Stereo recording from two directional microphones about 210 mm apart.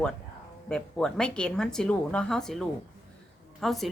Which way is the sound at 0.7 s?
5° left (ahead or behind).